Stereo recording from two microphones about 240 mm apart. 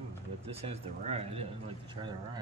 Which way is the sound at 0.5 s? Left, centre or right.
Right.